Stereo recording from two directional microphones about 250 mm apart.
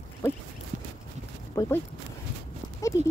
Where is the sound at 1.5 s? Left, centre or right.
Centre.